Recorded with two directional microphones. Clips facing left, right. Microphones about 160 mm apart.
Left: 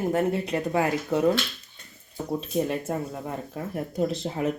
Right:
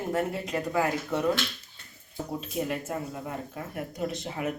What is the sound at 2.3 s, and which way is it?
Speech, 30° left (ahead or behind).